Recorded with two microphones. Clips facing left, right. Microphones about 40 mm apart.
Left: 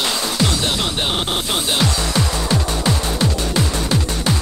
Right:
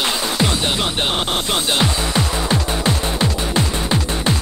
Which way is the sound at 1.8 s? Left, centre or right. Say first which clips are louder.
Even; right.